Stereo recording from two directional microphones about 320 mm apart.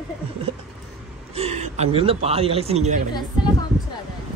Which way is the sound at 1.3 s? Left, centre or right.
Centre.